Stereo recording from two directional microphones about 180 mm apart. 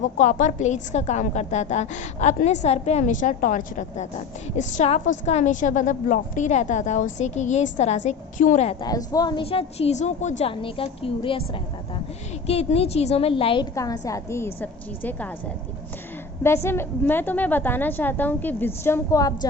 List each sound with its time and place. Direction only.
0.2 s a woman's voice: 45° left (ahead or behind)
8.8 s a woman's voice: 20° left (ahead or behind); by 10.5 s 40° left (ahead or behind)
10.5 s a woman's voice: 30° left (ahead or behind); by 15.3 s 10° left (ahead or behind)
16.6 s a woman's voice: 10° left (ahead or behind)